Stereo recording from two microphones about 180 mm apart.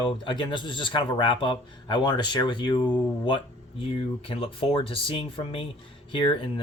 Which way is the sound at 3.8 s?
30° left (ahead or behind).